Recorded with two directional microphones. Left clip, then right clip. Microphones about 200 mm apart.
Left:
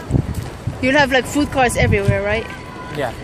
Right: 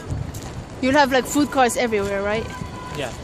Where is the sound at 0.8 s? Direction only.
20° right (ahead or behind).